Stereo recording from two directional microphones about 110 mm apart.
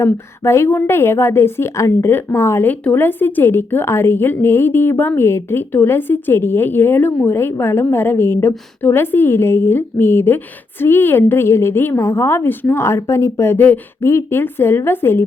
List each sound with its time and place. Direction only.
0.0 s a woman's voice: 25° left (ahead or behind)